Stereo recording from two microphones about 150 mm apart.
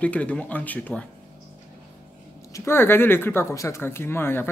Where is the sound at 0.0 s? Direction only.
10° left (ahead or behind).